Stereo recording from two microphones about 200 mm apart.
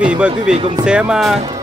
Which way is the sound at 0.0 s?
5° right (ahead or behind).